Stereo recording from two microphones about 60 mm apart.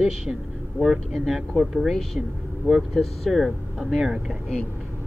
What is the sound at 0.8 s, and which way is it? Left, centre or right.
Speech, centre.